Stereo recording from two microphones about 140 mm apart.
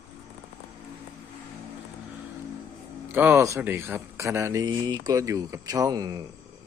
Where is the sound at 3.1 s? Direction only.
15° right (ahead or behind).